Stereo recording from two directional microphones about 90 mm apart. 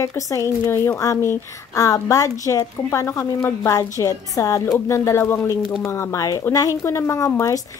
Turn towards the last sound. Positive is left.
turn(degrees=35)  # may be behind; listen again after turning